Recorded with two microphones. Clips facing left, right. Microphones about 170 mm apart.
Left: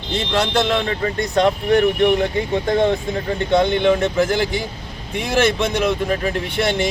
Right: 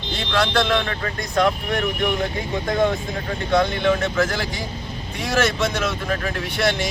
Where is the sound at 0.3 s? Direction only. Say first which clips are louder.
Left 1 dB; 20° left (ahead or behind).